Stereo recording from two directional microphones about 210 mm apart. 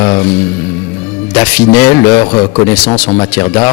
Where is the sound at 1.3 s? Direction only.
5° left (ahead or behind).